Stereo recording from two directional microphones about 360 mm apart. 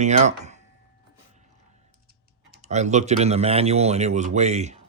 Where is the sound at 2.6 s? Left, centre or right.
Centre.